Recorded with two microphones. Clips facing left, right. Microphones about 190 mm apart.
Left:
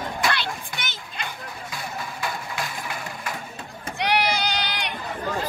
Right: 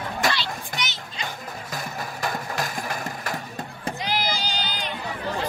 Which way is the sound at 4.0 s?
70° left (ahead or behind).